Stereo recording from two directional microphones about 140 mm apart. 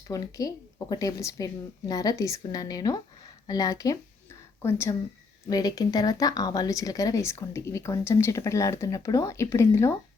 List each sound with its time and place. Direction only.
0.1 s speech: 25° left (ahead or behind)